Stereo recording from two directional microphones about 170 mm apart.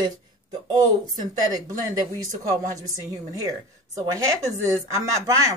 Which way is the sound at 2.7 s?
20° right (ahead or behind).